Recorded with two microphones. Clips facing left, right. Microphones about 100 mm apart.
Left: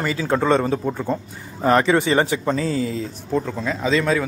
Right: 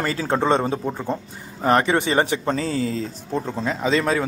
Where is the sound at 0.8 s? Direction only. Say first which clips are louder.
Left 2 dB; 10° right (ahead or behind).